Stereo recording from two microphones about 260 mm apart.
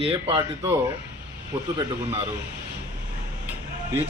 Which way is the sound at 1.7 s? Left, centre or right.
Centre.